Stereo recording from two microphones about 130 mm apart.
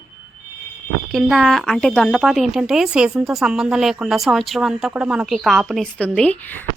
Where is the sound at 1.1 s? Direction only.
5° left (ahead or behind).